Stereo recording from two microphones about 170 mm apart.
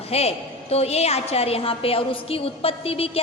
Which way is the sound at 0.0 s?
35° left (ahead or behind).